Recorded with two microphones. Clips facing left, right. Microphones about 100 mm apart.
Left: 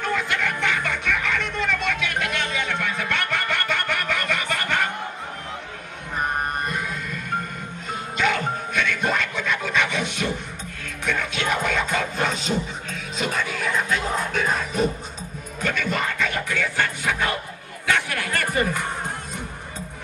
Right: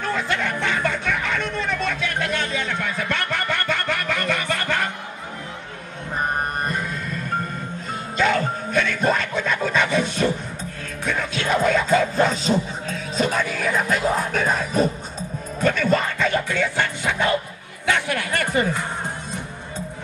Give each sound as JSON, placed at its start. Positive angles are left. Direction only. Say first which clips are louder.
{"t": 0.0, "sound": "music", "louder": "right 1 dB", "side_deg": -35}
{"t": 8.2, "sound": "music", "louder": "right 3 dB", "side_deg": -35}